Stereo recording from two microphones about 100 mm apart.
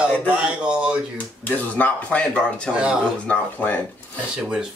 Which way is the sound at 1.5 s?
15° left (ahead or behind).